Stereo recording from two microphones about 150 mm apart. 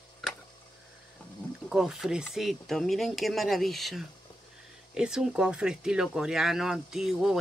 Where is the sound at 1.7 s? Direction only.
5° right (ahead or behind).